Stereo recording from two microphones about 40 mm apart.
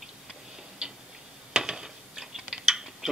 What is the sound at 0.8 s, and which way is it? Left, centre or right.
Tick-tock, right.